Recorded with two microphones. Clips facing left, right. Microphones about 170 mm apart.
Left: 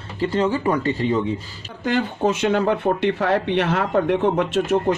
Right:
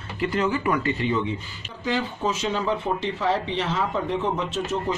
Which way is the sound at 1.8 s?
60° left (ahead or behind).